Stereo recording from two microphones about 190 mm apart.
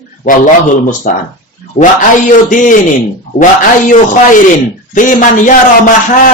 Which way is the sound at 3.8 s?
45° left (ahead or behind).